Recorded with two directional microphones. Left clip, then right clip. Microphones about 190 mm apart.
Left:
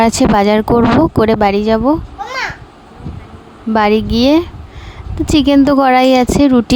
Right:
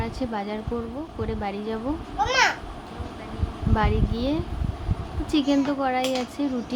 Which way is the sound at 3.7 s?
65° left (ahead or behind).